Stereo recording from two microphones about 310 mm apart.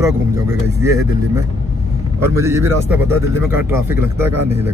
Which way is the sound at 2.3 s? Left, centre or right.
Centre.